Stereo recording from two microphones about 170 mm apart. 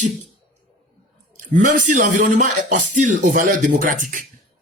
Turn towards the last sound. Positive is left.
turn(degrees=-50)  # may be behind; listen again after turning